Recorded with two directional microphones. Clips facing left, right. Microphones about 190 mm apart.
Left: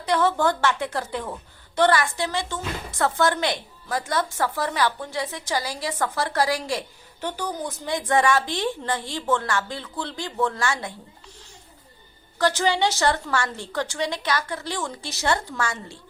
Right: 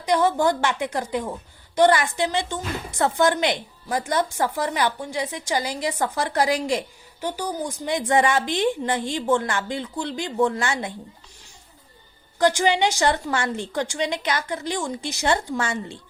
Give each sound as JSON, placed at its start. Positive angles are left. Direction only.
{"t": 0.0, "sound": "speech", "side_deg": -15}
{"t": 12.4, "sound": "speech", "side_deg": -15}